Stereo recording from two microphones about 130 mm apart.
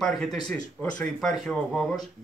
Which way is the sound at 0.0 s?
5° left (ahead or behind).